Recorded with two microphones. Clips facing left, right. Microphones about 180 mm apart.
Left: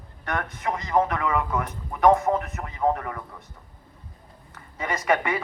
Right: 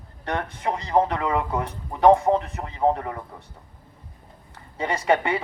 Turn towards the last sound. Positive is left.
turn(degrees=-30)  # may be behind; listen again after turning